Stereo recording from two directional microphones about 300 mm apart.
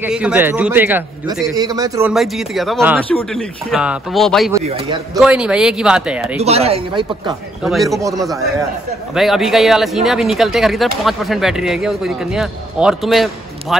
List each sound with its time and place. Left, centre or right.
0.0 s speech: centre
4.6 s a man's voice: centre
5.2 s speech: centre
6.4 s speech: right
7.6 s speech: centre